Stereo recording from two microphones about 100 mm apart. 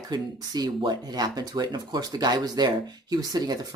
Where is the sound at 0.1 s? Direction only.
45° right (ahead or behind).